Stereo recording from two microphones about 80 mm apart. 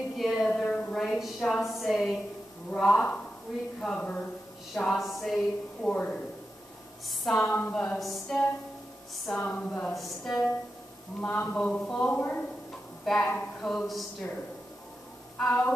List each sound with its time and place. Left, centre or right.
0.2 s a woman's voice: centre
0.5 s a woman's voice: centre
3.5 s a woman's voice: centre
3.8 s speech: centre
4.7 s a woman's voice: centre
5.8 s speech: centre
7.3 s a woman's voice: left
8.0 s a woman's voice: centre
9.3 s speech: centre
9.9 s a woman's voice: centre
11.1 s a woman's voice: centre
13.7 s a woman's voice: centre
15.3 s speech: centre